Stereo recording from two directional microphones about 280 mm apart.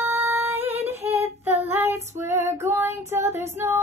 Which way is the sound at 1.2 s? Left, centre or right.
Centre.